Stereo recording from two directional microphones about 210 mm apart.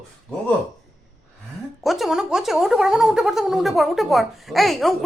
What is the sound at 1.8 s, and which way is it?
Speech, centre (ahead or behind).